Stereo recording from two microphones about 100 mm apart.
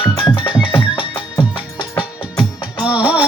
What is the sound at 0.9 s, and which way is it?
Music, 60° left (ahead or behind).